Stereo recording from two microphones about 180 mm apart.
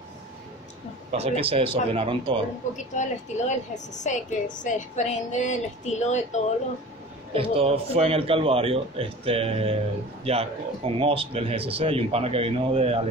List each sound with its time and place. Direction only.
1.1 s speech: 35° right (ahead or behind)
2.9 s a woman's voice: 40° left (ahead or behind)
7.3 s speech: 30° right (ahead or behind)